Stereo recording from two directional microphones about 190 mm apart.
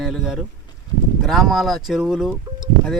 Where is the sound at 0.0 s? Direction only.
Centre (ahead or behind).